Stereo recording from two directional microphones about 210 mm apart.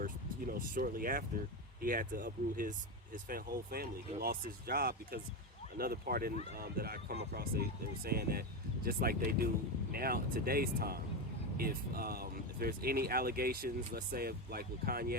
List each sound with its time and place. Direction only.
0.0 s speech: 40° right (ahead or behind)